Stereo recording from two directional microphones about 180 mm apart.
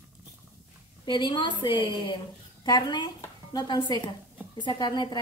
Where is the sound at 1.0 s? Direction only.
25° left (ahead or behind).